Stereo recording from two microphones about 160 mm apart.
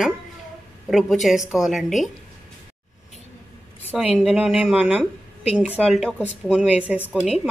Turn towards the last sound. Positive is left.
turn(degrees=-10)  # may be behind; listen again after turning